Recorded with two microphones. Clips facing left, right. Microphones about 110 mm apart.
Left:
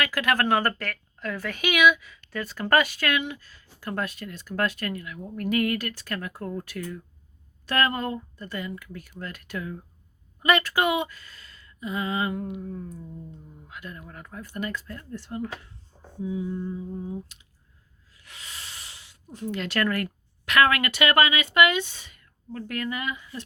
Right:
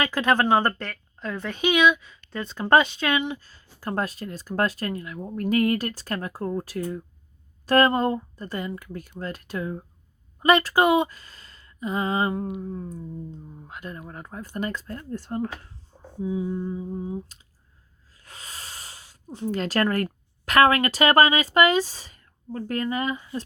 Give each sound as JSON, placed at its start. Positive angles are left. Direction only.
{"t": 0.0, "sound": "speech", "side_deg": -30}
{"t": 3.4, "sound": "a woman's voice", "side_deg": -35}
{"t": 16.2, "sound": "speech", "side_deg": -30}
{"t": 18.2, "sound": "sanding", "side_deg": -40}
{"t": 19.3, "sound": "a woman's voice", "side_deg": -35}